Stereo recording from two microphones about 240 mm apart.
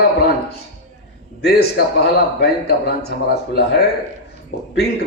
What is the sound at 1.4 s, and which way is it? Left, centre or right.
A man's voice, left.